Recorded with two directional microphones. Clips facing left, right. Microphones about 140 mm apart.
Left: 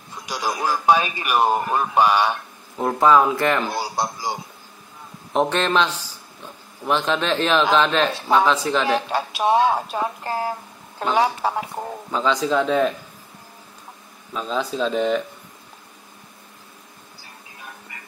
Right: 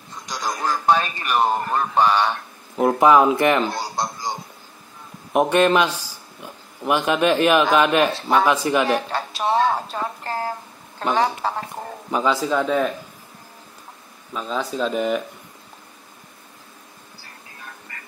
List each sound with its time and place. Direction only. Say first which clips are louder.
0.1 s speech: left 2 dB; 10° left (ahead or behind)
2.8 s speech: right 2 dB; 15° right (ahead or behind)
3.7 s speech: left 1 dB; 10° left (ahead or behind)
5.3 s a man's voice: right 3 dB; 10° right (ahead or behind)
9.1 s speech: left 2 dB; 15° left (ahead or behind)
12.1 s speech: even; 10° right (ahead or behind)
14.3 s speech: left 1 dB; centre (ahead or behind)
17.9 s music: even; 15° left (ahead or behind)